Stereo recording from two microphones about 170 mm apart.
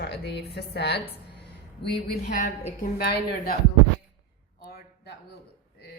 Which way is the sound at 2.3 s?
50° left (ahead or behind).